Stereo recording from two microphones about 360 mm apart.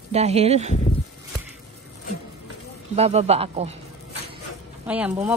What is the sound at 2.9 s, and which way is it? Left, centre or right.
Speech, centre.